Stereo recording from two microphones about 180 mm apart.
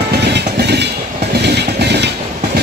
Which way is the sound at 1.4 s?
65° right (ahead or behind).